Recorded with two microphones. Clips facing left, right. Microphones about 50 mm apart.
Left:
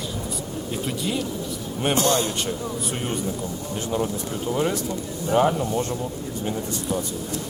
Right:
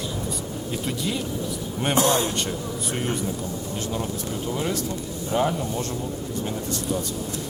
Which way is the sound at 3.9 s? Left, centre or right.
Centre.